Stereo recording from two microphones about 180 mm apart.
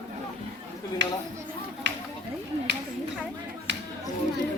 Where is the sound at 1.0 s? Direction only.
75° right (ahead or behind).